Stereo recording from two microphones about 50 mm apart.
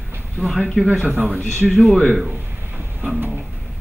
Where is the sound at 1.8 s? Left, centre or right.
Centre.